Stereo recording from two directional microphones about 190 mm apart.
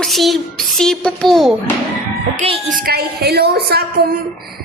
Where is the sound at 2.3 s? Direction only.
30° right (ahead or behind).